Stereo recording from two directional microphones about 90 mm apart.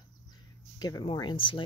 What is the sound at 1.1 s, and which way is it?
Speech, 60° left (ahead or behind).